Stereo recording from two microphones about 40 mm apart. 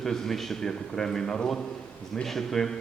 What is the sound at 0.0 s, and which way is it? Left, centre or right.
A man's voice, centre.